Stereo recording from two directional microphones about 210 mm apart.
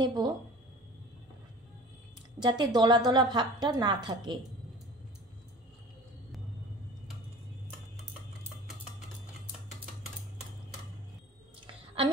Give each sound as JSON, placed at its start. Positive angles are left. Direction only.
{"t": 0.0, "sound": "speech", "side_deg": -20}
{"t": 2.4, "sound": "a woman's voice", "side_deg": -20}
{"t": 11.6, "sound": "a sound", "side_deg": -25}